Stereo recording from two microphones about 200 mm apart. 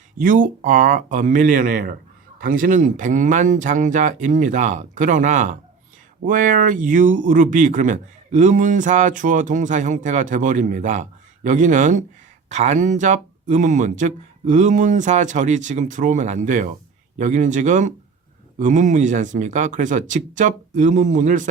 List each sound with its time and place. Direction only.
0.2 s speech: 40° right (ahead or behind)